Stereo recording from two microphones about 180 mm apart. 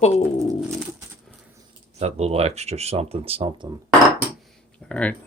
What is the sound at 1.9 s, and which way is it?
Speech, 35° right (ahead or behind).